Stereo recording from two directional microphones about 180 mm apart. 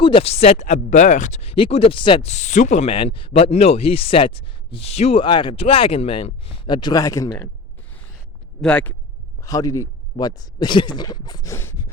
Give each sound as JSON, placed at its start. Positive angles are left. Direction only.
{"t": 0.0, "sound": "speech", "side_deg": 30}
{"t": 2.3, "sound": "speech", "side_deg": 40}
{"t": 8.6, "sound": "speech", "side_deg": 10}
{"t": 9.4, "sound": "speech", "side_deg": 20}